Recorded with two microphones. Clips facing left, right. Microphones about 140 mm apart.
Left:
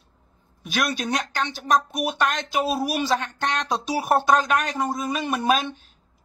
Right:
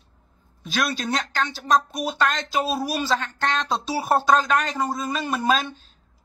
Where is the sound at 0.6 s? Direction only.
15° left (ahead or behind).